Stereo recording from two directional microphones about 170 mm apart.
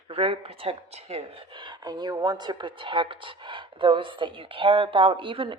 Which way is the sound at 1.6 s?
25° right (ahead or behind).